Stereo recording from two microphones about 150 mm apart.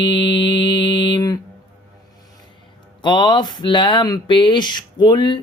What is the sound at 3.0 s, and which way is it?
Speech, 30° left (ahead or behind).